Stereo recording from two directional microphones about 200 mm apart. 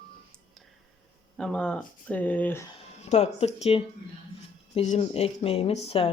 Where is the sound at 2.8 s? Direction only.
30° left (ahead or behind).